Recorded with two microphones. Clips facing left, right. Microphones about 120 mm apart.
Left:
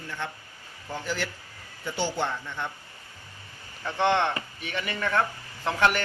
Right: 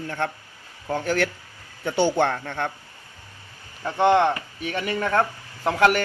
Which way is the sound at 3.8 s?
35° right (ahead or behind).